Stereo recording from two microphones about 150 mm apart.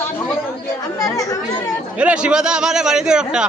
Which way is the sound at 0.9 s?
25° left (ahead or behind).